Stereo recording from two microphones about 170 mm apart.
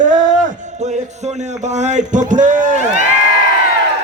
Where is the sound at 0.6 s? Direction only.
45° right (ahead or behind).